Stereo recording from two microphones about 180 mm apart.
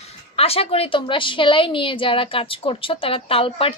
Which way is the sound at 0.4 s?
35° left (ahead or behind).